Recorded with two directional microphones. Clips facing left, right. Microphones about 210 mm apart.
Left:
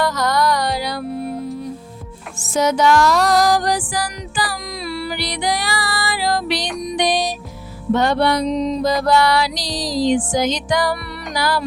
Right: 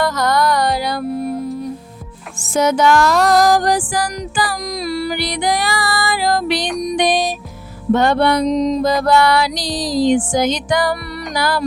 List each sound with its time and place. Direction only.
0.0 s music: 50° right (ahead or behind)
2.5 s music: 50° right (ahead or behind)